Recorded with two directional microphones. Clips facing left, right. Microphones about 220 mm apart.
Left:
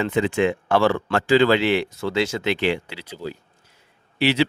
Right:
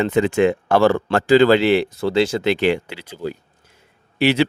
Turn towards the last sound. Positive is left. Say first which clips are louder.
# right 3 dB
turn(degrees=-50)  # may be behind; listen again after turning